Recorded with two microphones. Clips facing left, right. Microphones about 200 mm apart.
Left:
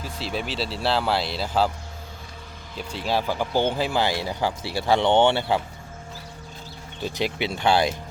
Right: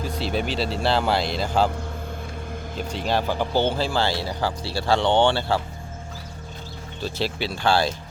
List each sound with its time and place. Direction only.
0.0 s speech: centre (ahead or behind)
2.7 s speech: 40° right (ahead or behind)
3.1 s speech: 5° left (ahead or behind)
7.3 s speech: 20° left (ahead or behind)